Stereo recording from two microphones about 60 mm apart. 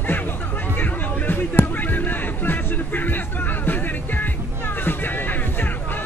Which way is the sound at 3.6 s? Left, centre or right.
Left.